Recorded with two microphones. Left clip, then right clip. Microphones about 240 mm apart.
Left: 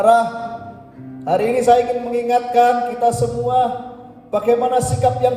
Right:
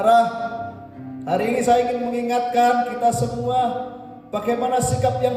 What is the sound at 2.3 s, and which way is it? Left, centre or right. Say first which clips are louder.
Speech: left 4 dB; left.